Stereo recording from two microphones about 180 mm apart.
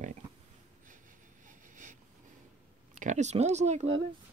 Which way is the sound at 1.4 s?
45° right (ahead or behind).